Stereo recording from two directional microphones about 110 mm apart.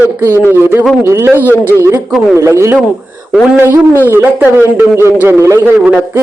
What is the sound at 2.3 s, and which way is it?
Speech, 25° right (ahead or behind).